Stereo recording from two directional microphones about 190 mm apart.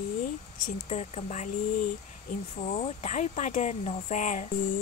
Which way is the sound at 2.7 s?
35° left (ahead or behind).